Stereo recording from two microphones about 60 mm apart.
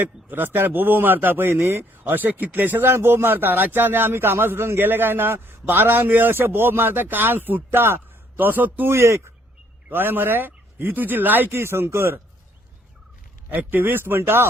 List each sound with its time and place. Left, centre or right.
0.0 s speech: right
8.4 s speech: right
8.9 s speech: right
9.9 s speech: right
13.5 s speech: right